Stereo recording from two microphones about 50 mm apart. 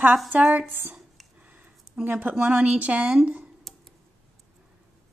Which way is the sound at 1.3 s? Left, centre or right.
Right.